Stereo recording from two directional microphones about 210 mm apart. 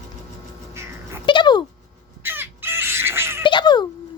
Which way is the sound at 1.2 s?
20° left (ahead or behind).